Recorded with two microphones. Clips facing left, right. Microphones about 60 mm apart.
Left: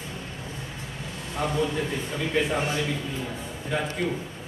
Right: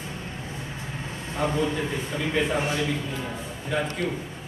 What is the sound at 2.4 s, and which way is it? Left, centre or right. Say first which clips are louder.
Speech: even; centre.